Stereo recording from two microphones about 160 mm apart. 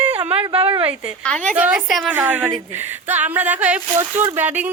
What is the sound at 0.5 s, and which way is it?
Speech, 35° right (ahead or behind).